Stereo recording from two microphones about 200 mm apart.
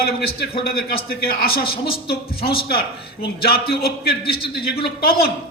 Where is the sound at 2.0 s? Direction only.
25° left (ahead or behind).